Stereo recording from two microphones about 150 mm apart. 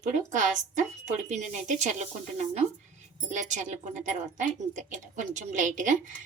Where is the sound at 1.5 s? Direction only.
55° right (ahead or behind).